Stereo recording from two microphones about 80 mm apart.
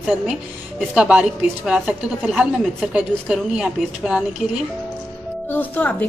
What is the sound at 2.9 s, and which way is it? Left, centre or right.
A woman's voice, centre.